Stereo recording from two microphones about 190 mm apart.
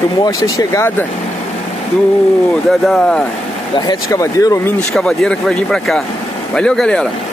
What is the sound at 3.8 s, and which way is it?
Speech, 20° left (ahead or behind).